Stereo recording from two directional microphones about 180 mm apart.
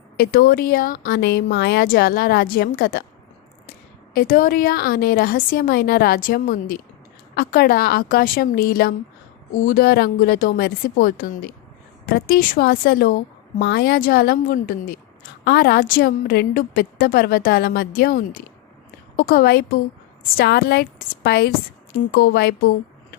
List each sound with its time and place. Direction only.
0.2 s a woman's voice: 55° left (ahead or behind)